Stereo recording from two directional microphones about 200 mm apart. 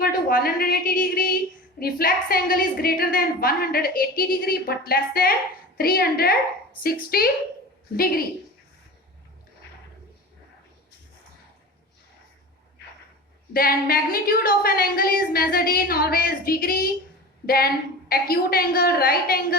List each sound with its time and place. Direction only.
0.0 s a woman's voice: 45° left (ahead or behind)
13.5 s a woman's voice: 50° left (ahead or behind)